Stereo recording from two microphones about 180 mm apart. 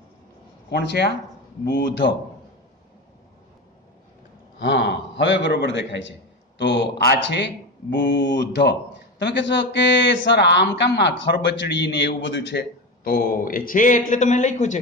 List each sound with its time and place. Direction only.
0.7 s speech: 65° left (ahead or behind)
4.6 s a man's voice: 75° left (ahead or behind); by 14.8 s 40° left (ahead or behind)